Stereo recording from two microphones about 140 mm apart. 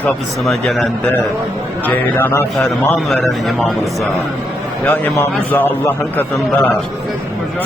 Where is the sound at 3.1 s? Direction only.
Centre (ahead or behind).